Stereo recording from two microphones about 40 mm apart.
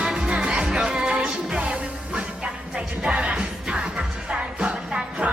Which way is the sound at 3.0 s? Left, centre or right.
Right.